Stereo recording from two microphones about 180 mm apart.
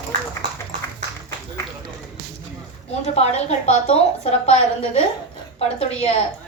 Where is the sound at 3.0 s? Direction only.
40° left (ahead or behind).